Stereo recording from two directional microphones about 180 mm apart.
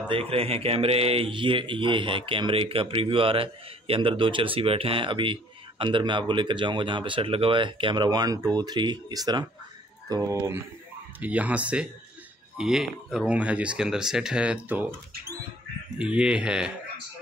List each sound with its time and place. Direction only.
0.1 s speech: 35° right (ahead or behind); by 14.9 s 5° right (ahead or behind)
16.0 s speech: 5° right (ahead or behind)